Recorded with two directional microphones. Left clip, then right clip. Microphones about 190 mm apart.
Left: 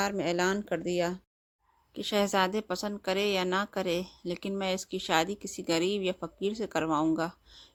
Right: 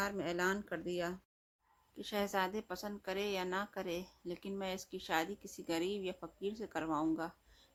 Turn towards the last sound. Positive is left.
turn(degrees=40)  # may be behind; listen again after turning